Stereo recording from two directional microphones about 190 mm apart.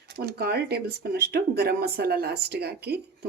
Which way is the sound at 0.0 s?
55° right (ahead or behind).